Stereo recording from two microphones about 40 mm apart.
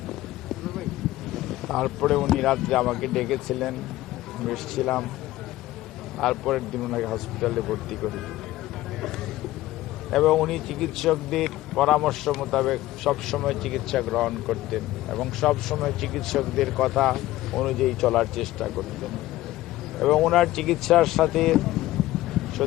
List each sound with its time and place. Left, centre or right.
1.3 s speech: centre
6.1 s speech: centre
10.1 s speech: centre